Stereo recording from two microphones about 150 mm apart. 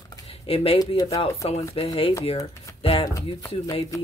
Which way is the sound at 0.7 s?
25° left (ahead or behind).